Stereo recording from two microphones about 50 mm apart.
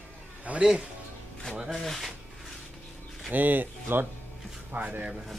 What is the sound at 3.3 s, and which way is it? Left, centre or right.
Speech, right.